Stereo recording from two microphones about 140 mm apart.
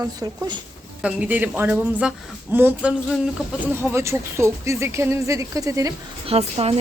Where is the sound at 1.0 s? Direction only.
10° right (ahead or behind).